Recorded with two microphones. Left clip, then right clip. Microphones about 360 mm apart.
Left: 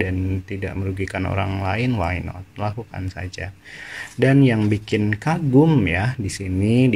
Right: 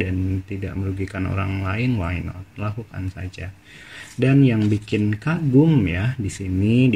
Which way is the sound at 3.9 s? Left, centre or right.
Centre.